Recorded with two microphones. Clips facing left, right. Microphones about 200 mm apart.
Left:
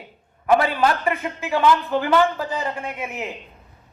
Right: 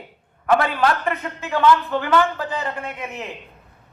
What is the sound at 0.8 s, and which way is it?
A man's voice, 10° left (ahead or behind).